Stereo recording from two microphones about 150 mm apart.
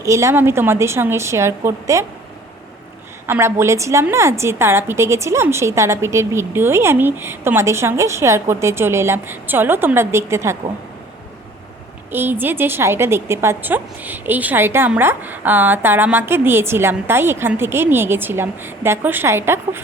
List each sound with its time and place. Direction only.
0.0 s a woman's voice: 20° right (ahead or behind)
3.2 s a woman's voice: 15° right (ahead or behind)
12.1 s a woman's voice: 15° right (ahead or behind)